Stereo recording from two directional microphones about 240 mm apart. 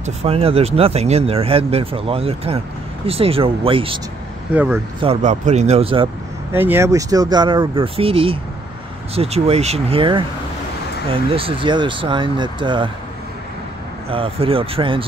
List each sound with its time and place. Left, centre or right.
0.0 s speech: right
5.0 s speech: right
6.5 s speech: centre
14.1 s speech: right